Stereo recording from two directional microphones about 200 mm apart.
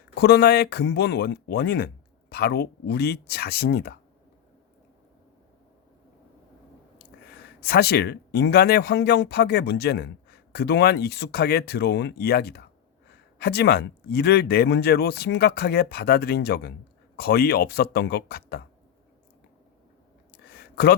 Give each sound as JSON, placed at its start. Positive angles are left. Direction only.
{"t": 0.1, "sound": "speech", "side_deg": 55}
{"t": 7.6, "sound": "speech", "side_deg": 50}
{"t": 20.3, "sound": "a sound", "side_deg": 50}